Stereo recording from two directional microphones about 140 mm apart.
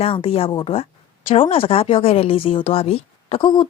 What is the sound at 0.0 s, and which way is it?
A woman's voice, 40° left (ahead or behind).